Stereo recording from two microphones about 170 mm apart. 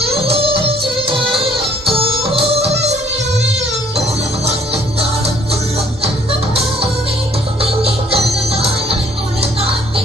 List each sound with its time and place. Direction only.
0.3 s music: 35° right (ahead or behind)
1.8 s music: 35° right (ahead or behind)
4.4 s music: 35° right (ahead or behind)
7.6 s music: 35° right (ahead or behind)